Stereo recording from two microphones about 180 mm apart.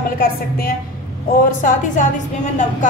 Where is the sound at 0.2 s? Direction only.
55° left (ahead or behind).